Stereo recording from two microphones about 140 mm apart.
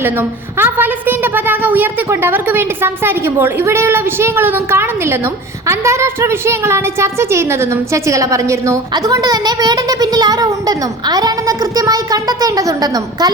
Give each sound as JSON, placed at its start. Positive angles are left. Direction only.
{"t": 0.0, "sound": "a woman's voice", "side_deg": -15}